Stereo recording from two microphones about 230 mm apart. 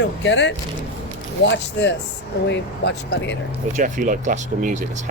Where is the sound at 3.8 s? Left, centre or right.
Right.